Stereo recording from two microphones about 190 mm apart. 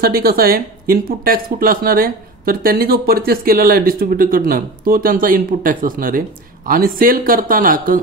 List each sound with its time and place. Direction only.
0.0 s speech: 50° right (ahead or behind)